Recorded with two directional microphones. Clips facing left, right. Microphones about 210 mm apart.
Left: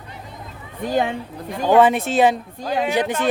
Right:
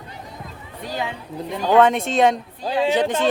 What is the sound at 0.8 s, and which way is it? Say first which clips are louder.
Speech: left 7 dB; 50° left (ahead or behind).